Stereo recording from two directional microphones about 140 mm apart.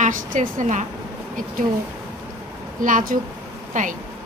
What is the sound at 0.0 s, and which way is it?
Speech, 75° right (ahead or behind).